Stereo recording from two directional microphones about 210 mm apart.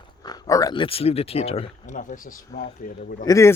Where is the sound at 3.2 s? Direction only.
15° left (ahead or behind).